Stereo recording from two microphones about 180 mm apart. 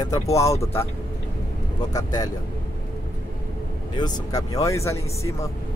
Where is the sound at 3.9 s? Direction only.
25° left (ahead or behind).